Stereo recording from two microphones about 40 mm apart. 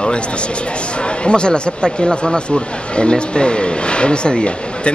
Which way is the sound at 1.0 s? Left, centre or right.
Left.